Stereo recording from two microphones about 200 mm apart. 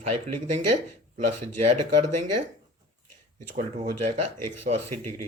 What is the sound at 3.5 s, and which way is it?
Speech, 40° right (ahead or behind).